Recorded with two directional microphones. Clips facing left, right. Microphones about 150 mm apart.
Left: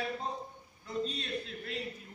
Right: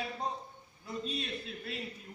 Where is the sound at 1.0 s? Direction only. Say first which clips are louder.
Left 1 dB; 5° right (ahead or behind).